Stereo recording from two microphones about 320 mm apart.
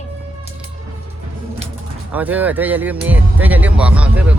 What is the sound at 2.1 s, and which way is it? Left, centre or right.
Speech, centre.